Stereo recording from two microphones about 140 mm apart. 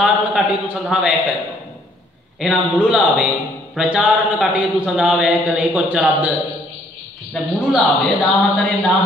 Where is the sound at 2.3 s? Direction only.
5° right (ahead or behind).